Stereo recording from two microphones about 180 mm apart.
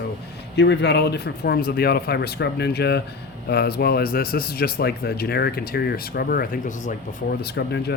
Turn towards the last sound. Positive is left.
turn(degrees=65)  # may be behind; listen again after turning